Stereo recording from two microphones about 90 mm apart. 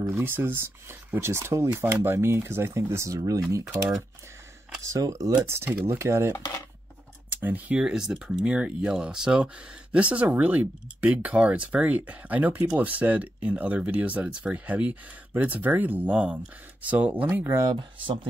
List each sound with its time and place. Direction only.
0.1 s speech: 25° right (ahead or behind)
4.8 s speech: 35° right (ahead or behind)
7.2 s speech: 20° right (ahead or behind)
17.6 s speech: 45° right (ahead or behind)